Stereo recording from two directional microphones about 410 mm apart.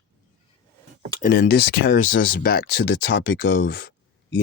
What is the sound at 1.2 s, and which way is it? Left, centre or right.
Speech, left.